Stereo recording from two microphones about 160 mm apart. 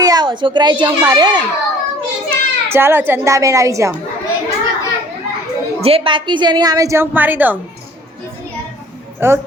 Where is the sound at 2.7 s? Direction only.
15° right (ahead or behind).